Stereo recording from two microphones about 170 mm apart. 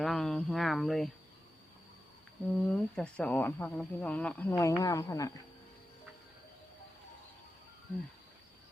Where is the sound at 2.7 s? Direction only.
5° left (ahead or behind).